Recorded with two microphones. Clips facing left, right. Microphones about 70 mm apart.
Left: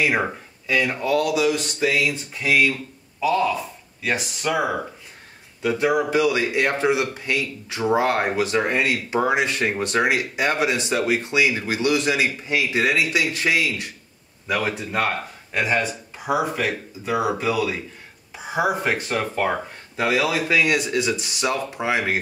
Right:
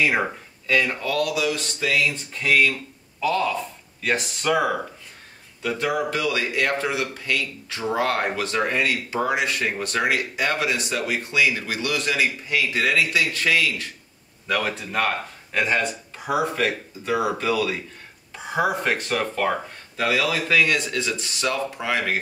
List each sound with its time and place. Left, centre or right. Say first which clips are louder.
0.7 s speech: left 1 dB; centre
5.6 s speech: left 4 dB; centre